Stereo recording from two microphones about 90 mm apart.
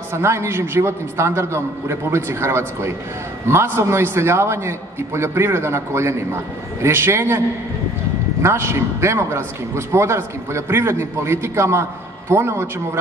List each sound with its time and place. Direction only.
0.1 s a man's voice: 30° right (ahead or behind)